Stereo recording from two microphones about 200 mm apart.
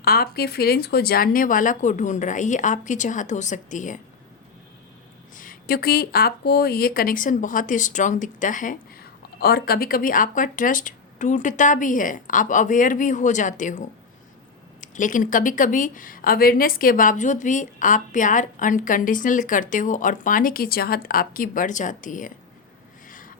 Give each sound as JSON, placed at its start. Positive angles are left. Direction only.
{"t": 0.0, "sound": "speech", "side_deg": 50}
{"t": 5.3, "sound": "speech", "side_deg": 45}
{"t": 23.0, "sound": "a sound", "side_deg": 40}